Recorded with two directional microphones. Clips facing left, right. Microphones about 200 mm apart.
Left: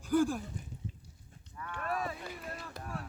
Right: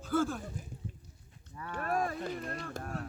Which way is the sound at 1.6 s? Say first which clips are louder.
Right 4 dB; 40° right (ahead or behind).